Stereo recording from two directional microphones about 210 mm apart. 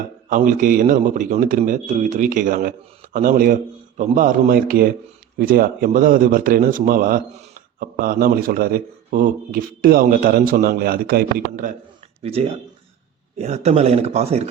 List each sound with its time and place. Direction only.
0.3 s a man's voice: 40° right (ahead or behind)
12.2 s a man's voice: 30° right (ahead or behind)